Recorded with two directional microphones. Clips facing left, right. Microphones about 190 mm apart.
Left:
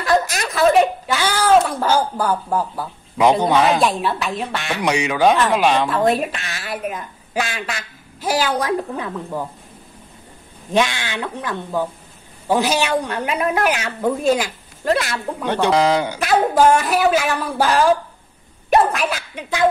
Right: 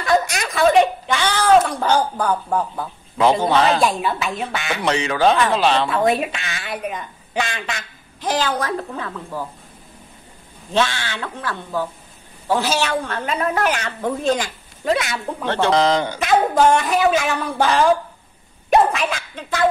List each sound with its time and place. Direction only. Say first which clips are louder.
0.0 s a woman's voice: even; centre (ahead or behind)
3.8 s a woman's voice: even; centre (ahead or behind)
4.8 s a woman's voice: left 1 dB; 10° left (ahead or behind)
5.9 s a woman's voice: left 1 dB; centre (ahead or behind); by 9.5 s 20° left (ahead or behind)
10.7 s a woman's voice: left 2 dB; 15° left (ahead or behind)
15.4 s a woman's voice: left 1 dB; 10° left (ahead or behind)